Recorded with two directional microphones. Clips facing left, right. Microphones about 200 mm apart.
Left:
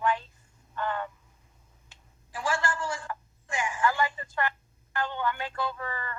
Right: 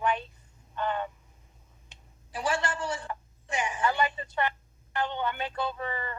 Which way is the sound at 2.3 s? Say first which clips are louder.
Even; 20° right (ahead or behind).